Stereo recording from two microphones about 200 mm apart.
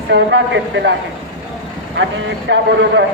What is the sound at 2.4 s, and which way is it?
Speech, 60° right (ahead or behind).